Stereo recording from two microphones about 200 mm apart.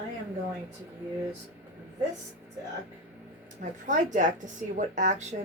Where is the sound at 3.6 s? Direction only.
40° right (ahead or behind).